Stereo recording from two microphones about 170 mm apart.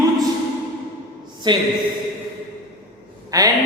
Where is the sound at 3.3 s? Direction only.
20° right (ahead or behind).